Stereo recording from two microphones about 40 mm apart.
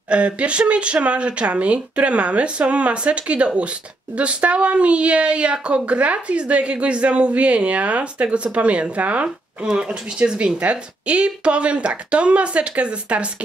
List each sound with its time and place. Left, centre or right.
0.1 s speech: right